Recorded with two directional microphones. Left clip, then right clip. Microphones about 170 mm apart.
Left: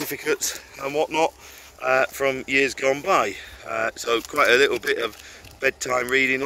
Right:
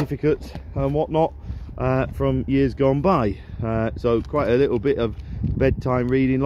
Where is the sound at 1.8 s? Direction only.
40° right (ahead or behind).